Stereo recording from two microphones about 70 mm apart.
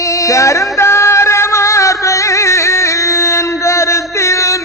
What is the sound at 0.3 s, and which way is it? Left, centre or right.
Music, left.